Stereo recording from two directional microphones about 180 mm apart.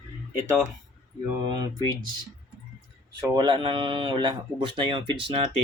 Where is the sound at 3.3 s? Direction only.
25° right (ahead or behind).